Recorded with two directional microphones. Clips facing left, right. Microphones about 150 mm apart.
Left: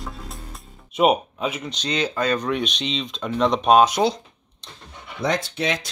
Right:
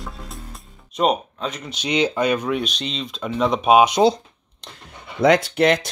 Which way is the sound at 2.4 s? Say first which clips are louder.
Even; centre (ahead or behind).